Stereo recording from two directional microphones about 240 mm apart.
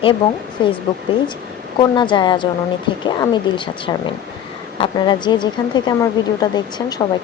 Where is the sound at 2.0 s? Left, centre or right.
Centre.